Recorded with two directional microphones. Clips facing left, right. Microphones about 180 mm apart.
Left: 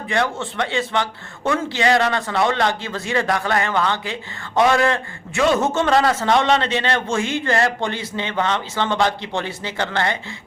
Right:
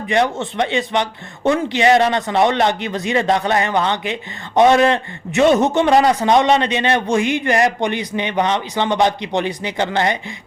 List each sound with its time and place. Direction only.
0.1 s a man's voice: 20° right (ahead or behind)